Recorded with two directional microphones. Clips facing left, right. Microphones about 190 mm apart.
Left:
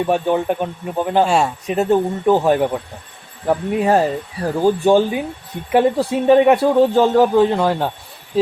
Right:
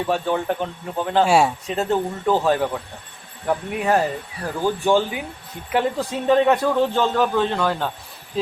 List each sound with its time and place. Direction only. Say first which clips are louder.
0.1 s speech: left 3 dB; 15° left (ahead or behind)
1.2 s speech: right 1 dB; 5° right (ahead or behind)
1.6 s speech: left 6 dB; 15° left (ahead or behind)
3.4 s speech: left 5 dB; 30° left (ahead or behind)
4.9 s speech: left 5 dB; 15° left (ahead or behind)